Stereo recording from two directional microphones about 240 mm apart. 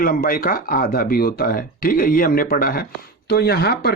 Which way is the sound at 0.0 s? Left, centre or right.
Left.